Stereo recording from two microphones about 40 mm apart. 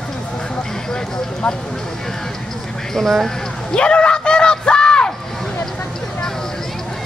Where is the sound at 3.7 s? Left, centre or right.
Left.